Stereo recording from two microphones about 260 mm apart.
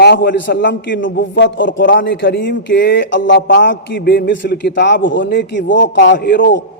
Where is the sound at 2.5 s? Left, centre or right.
Left.